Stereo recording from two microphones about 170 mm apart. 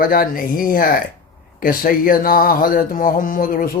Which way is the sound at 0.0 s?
60° left (ahead or behind).